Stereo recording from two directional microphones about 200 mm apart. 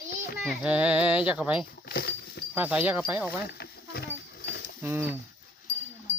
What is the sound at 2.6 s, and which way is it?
Speech, 10° right (ahead or behind).